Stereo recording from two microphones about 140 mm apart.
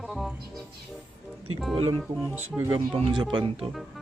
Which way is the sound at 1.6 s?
Centre (ahead or behind).